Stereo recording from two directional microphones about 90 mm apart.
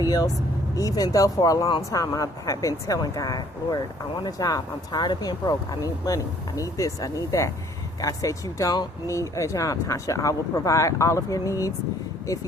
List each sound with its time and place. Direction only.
0.0 s speech: 40° left (ahead or behind)